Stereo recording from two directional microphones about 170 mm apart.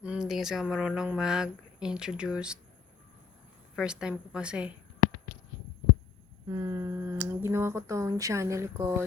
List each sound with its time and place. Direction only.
0.0 s speech: 5° right (ahead or behind)
3.8 s speech: 5° right (ahead or behind)
6.5 s speech: 20° right (ahead or behind)